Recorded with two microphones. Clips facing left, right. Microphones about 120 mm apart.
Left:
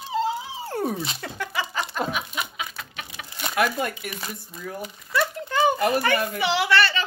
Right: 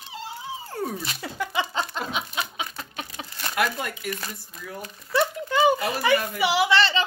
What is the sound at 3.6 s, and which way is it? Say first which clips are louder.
Speech: left 3 dB; 55° left (ahead or behind).